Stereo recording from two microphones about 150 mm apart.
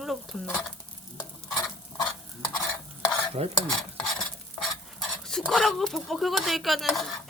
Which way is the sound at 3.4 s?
40° right (ahead or behind).